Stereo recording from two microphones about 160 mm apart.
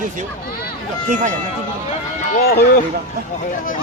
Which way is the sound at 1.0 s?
50° right (ahead or behind).